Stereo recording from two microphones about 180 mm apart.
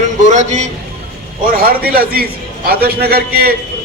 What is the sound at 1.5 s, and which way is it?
A man's voice, 55° right (ahead or behind).